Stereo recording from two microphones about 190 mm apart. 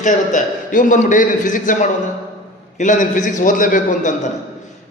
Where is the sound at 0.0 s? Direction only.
45° left (ahead or behind).